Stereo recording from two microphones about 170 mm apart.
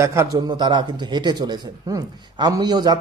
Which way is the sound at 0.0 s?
15° right (ahead or behind).